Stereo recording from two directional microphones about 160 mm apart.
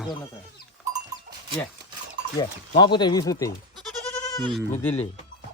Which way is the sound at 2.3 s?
30° left (ahead or behind).